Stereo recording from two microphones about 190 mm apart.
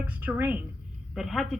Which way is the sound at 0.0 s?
5° right (ahead or behind).